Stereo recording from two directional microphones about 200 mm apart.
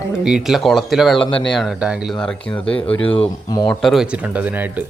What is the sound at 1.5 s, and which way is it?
Speech, centre (ahead or behind).